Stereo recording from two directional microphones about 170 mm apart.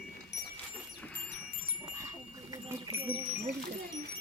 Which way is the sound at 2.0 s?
20° right (ahead or behind).